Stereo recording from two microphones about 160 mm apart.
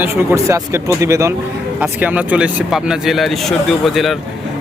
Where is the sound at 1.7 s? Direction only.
10° right (ahead or behind).